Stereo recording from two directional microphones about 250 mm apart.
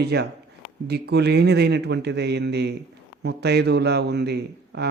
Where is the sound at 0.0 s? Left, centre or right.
Right.